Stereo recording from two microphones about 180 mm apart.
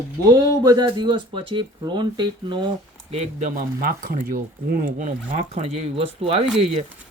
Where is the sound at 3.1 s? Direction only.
35° right (ahead or behind).